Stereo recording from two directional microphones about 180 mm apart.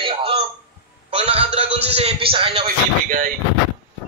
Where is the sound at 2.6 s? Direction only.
50° right (ahead or behind).